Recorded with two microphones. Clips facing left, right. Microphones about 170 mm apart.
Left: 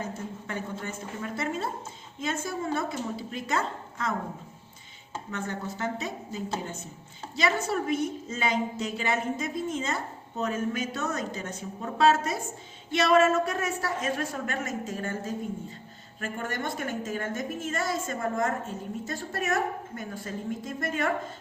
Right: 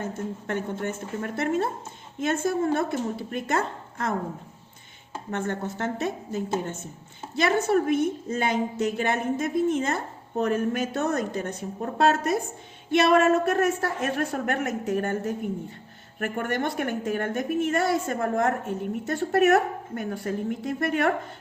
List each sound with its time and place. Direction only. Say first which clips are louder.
0.4 s a woman's voice: right 7 dB; 60° right (ahead or behind)
5.3 s a woman's voice: right 5 dB; 55° right (ahead or behind)